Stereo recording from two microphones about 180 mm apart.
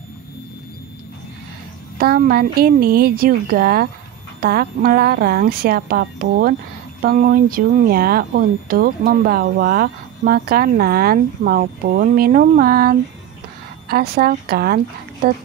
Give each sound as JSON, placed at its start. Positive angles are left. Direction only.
{"t": 2.0, "sound": "speech", "side_deg": -55}